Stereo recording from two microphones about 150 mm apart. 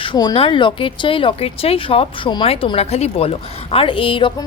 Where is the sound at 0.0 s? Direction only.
30° left (ahead or behind).